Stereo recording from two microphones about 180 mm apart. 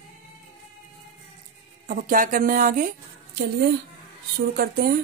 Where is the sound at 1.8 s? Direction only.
50° right (ahead or behind).